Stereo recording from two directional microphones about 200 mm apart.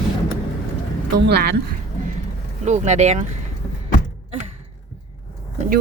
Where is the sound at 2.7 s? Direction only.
35° right (ahead or behind).